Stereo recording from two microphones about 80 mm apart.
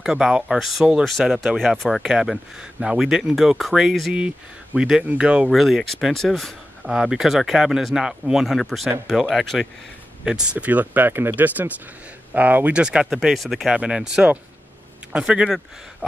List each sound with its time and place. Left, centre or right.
0.0 s speech: centre
5.5 s speech: centre
6.9 s speech: centre